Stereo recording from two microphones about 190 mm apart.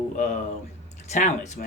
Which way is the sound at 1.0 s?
40° left (ahead or behind).